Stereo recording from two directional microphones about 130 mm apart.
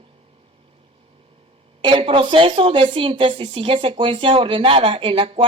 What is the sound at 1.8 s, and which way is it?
Speech, 40° right (ahead or behind).